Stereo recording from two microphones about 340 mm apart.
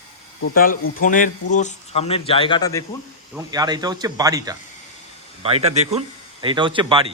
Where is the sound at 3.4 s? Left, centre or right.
Centre.